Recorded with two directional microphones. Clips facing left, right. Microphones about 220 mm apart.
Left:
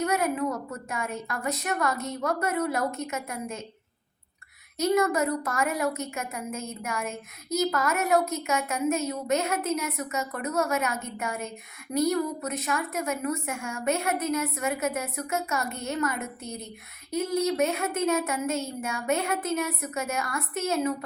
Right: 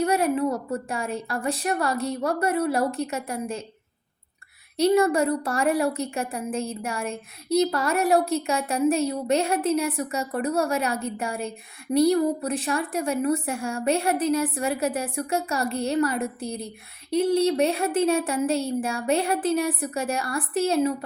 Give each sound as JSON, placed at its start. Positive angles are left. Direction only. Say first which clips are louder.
{"t": 0.0, "sound": "a woman's voice", "louder": "right 4 dB", "side_deg": -30}
{"t": 4.8, "sound": "a woman's voice", "louder": "right 4 dB", "side_deg": -30}